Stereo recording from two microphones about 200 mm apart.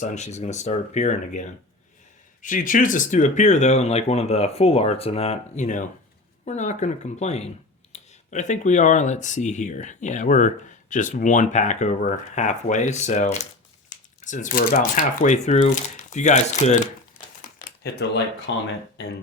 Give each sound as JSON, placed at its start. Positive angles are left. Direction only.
{"t": 0.0, "sound": "speech", "side_deg": 35}
{"t": 17.6, "sound": "a sound", "side_deg": 50}
{"t": 18.5, "sound": "speech", "side_deg": 65}